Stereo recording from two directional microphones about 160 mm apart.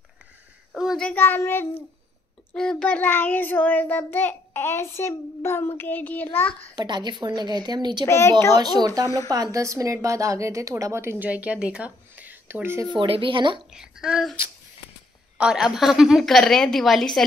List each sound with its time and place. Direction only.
0.7 s child singing: centre (ahead or behind)
6.7 s speech: 25° right (ahead or behind)
8.1 s child singing: 15° left (ahead or behind)
8.5 s a woman's voice: 25° right (ahead or behind)
12.9 s speech: 35° right (ahead or behind)
13.7 s a woman's voice: 5° right (ahead or behind)
15.3 s a woman's voice: 5° right (ahead or behind)